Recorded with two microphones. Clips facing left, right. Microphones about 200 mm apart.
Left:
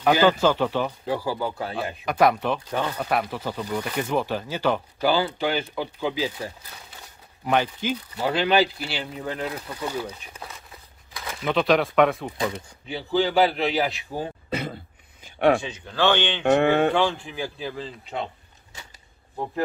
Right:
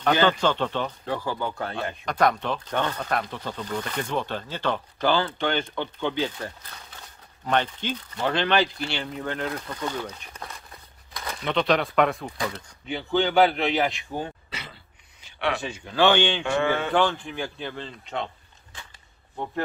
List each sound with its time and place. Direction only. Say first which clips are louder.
0.0 s speech: left 3 dB; 10° left (ahead or behind)
12.4 s speech: left 3 dB; 15° left (ahead or behind)
12.8 s a man's voice: left 1 dB; centre (ahead or behind)
14.5 s a sound: left 12 dB; 55° left (ahead or behind)
15.6 s speech: right 2 dB; 10° right (ahead or behind)
16.4 s mantra: left 6 dB; 60° left (ahead or behind)
16.9 s a man's voice: even; centre (ahead or behind)